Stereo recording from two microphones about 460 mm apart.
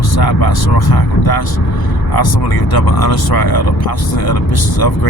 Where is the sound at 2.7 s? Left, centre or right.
Left.